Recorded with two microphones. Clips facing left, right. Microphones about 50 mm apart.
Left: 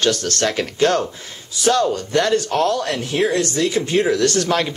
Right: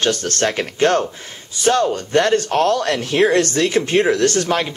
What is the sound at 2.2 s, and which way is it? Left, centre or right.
Speech, right.